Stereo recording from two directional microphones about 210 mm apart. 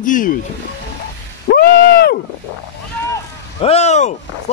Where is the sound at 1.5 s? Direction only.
45° left (ahead or behind).